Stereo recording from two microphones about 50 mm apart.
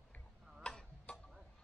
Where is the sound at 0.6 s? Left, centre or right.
Centre.